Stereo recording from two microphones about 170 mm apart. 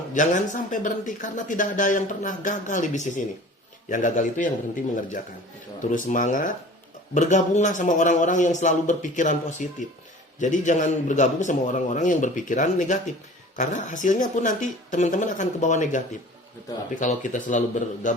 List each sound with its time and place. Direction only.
0.1 s speech: 50° left (ahead or behind)
5.8 s speech: 50° left (ahead or behind)